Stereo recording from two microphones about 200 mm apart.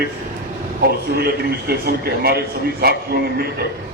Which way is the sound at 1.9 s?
50° right (ahead or behind).